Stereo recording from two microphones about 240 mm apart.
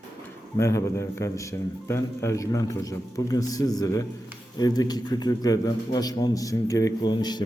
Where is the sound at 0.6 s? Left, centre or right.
Centre.